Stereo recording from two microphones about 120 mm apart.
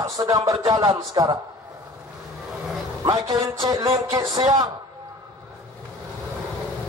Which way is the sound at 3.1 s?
35° right (ahead or behind).